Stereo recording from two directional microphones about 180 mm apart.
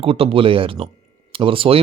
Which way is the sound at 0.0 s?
30° right (ahead or behind).